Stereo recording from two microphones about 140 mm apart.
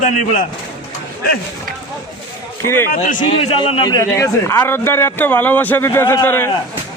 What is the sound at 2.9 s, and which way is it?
Speech, 70° left (ahead or behind).